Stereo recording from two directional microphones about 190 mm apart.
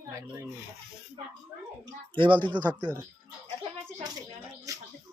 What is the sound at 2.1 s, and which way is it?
Speech, 25° right (ahead or behind).